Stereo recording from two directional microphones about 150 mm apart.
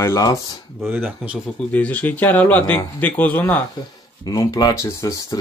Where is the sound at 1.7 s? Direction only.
10° left (ahead or behind).